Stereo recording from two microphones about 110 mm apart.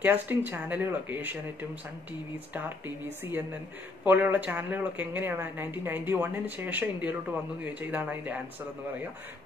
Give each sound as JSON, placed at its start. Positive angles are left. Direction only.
{"t": 0.0, "sound": "speech", "side_deg": -15}
{"t": 4.0, "sound": "speech", "side_deg": -15}